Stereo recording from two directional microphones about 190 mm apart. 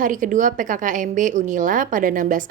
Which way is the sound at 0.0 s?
45° right (ahead or behind).